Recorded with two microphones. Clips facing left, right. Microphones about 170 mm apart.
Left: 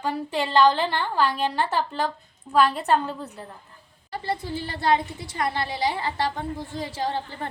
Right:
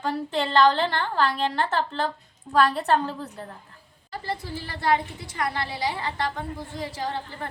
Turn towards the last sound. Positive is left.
turn(degrees=30)  # may be behind; listen again after turning